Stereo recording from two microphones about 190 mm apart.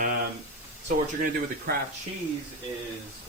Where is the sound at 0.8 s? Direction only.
45° right (ahead or behind).